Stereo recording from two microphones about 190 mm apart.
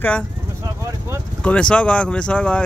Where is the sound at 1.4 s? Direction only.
5° left (ahead or behind).